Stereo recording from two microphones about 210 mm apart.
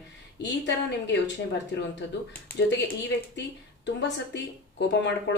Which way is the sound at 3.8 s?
55° left (ahead or behind).